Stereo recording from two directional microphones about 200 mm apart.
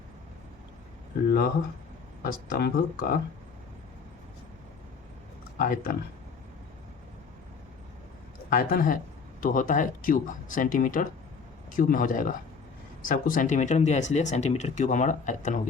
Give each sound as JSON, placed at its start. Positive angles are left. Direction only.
{"t": 2.2, "sound": "speech", "side_deg": 50}
{"t": 5.5, "sound": "speech", "side_deg": 45}
{"t": 8.4, "sound": "speech", "side_deg": 45}